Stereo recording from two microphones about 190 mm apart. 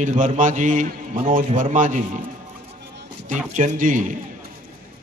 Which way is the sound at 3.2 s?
40° right (ahead or behind).